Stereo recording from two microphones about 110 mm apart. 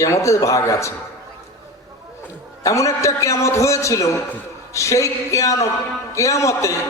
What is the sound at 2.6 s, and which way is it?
A man's voice, 30° left (ahead or behind).